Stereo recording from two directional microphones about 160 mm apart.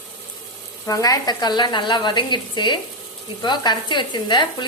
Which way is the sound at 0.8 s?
20° left (ahead or behind).